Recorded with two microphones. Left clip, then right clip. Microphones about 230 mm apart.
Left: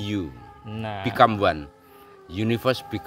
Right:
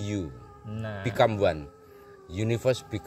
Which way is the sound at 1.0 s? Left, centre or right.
Centre.